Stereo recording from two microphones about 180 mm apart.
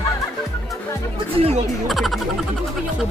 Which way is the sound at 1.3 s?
35° right (ahead or behind).